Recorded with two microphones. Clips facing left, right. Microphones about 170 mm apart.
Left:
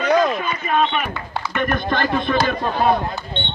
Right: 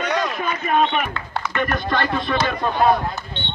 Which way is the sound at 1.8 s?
50° left (ahead or behind).